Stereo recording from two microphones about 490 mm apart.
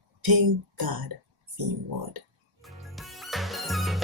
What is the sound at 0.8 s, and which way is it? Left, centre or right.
Speech, right.